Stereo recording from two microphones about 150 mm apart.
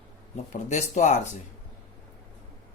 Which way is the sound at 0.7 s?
50° left (ahead or behind).